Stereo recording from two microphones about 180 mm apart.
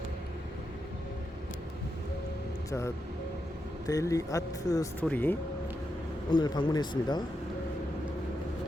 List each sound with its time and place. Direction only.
2.6 s speech: 15° left (ahead or behind)
6.3 s speech: 25° left (ahead or behind)